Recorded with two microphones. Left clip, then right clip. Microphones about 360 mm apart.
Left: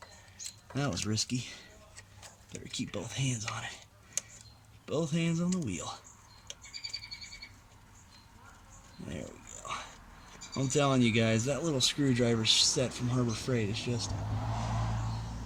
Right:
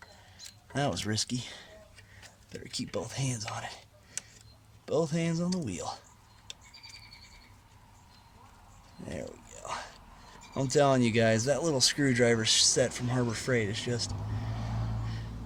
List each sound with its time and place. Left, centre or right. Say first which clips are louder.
0.7 s speech: right 4 dB; centre
2.7 s speech: right 2 dB; centre
4.9 s speech: right 4 dB; centre
9.0 s a sound: right 4 dB; centre
10.5 s speech: right 4 dB; centre